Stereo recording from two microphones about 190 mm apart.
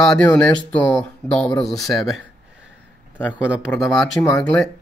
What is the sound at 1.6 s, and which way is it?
Speech, centre (ahead or behind).